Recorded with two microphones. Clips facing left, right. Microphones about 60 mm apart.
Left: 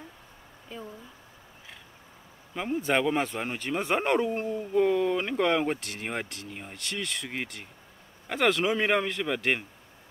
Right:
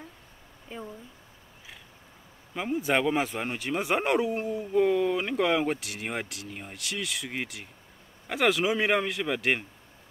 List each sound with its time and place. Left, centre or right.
0.7 s speech: right
2.5 s speech: centre